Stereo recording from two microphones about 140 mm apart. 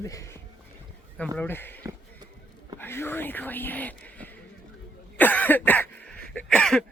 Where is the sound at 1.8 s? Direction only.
25° right (ahead or behind).